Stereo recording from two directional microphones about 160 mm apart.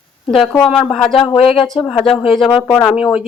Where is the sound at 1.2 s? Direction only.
35° left (ahead or behind).